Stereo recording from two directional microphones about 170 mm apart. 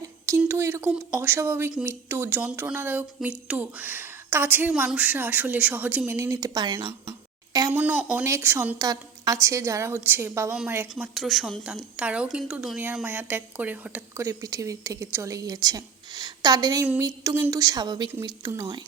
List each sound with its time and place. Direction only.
0.3 s speech: 15° right (ahead or behind)
7.7 s speech: 10° right (ahead or behind)
11.1 s speech: centre (ahead or behind)
14.3 s a woman's voice: 20° right (ahead or behind)